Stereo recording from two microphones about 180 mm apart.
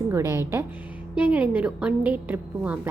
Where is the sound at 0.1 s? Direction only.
15° right (ahead or behind).